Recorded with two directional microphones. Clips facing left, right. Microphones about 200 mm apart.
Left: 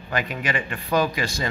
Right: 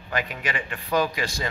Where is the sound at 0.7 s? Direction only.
40° left (ahead or behind).